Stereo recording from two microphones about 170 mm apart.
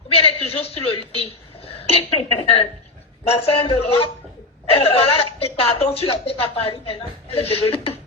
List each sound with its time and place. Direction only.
0.1 s speech: 35° left (ahead or behind)